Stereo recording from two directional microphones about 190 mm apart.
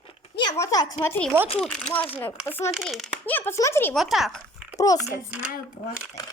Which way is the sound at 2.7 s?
Centre (ahead or behind).